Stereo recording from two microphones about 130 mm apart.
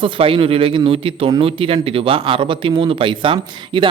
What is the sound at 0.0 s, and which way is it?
Speech, 40° right (ahead or behind).